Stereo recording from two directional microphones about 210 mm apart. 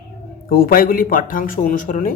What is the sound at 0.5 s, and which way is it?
Speech, 45° left (ahead or behind).